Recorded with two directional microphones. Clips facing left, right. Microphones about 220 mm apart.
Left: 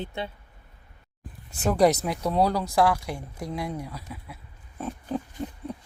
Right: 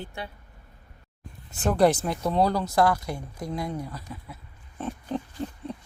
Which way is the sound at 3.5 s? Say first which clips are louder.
Right 1 dB; 5° left (ahead or behind).